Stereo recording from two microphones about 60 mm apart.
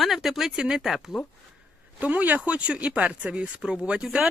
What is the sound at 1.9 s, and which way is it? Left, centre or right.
Speech, right.